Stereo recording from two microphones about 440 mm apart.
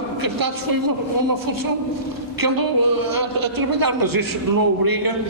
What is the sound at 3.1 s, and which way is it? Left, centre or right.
A woman's voice, right.